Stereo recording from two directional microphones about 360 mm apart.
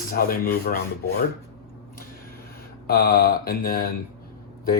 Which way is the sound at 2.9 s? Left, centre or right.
Left.